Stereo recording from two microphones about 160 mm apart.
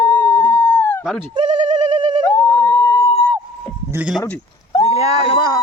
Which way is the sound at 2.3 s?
10° left (ahead or behind).